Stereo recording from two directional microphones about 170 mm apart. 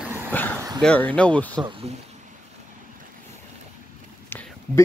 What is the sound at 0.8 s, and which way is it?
Speech, 10° left (ahead or behind).